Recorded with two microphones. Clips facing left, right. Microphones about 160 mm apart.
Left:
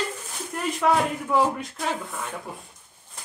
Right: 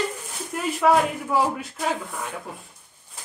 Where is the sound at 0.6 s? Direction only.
5° right (ahead or behind).